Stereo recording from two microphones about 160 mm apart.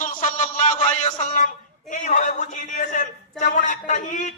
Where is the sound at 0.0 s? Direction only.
55° left (ahead or behind).